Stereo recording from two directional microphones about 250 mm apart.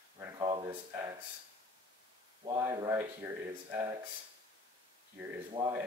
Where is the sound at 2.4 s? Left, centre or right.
Centre.